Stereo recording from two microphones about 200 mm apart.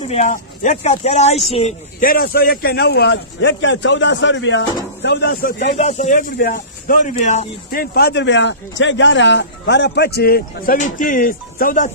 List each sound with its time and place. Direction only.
0.0 s a man's voice: 35° left (ahead or behind); by 5.8 s 50° left (ahead or behind)
5.8 s speech: 35° left (ahead or behind)